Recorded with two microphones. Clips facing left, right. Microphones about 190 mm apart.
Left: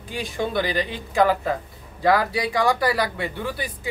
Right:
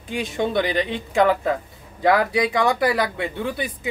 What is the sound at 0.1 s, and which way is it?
Speech, 20° right (ahead or behind).